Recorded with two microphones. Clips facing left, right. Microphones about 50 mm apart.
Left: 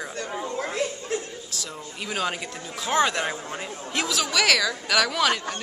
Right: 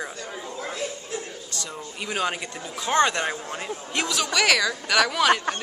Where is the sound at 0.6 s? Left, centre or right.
Left.